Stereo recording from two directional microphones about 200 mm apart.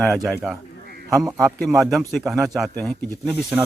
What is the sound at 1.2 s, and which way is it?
Speech, 15° right (ahead or behind).